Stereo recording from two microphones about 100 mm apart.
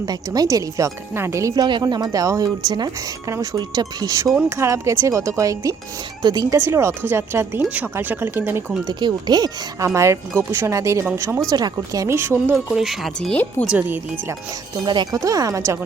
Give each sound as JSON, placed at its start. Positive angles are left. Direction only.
{"t": 0.0, "sound": "a woman's voice", "side_deg": -40}
{"t": 1.5, "sound": "a woman's voice", "side_deg": -45}
{"t": 6.6, "sound": "speech", "side_deg": -25}
{"t": 8.9, "sound": "speech", "side_deg": -45}
{"t": 9.8, "sound": "a woman's voice", "side_deg": -30}
{"t": 12.0, "sound": "speech", "side_deg": -25}
{"t": 12.5, "sound": "speech", "side_deg": -5}
{"t": 13.3, "sound": "speech", "side_deg": 20}
{"t": 13.7, "sound": "speech", "side_deg": -15}
{"t": 14.8, "sound": "speech", "side_deg": -50}
{"t": 15.2, "sound": "a woman's voice", "side_deg": -35}